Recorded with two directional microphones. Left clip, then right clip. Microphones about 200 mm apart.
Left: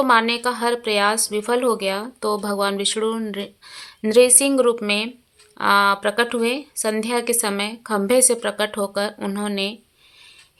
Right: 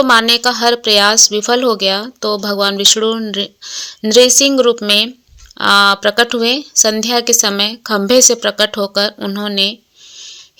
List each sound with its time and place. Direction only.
0.0 s speech: 25° right (ahead or behind)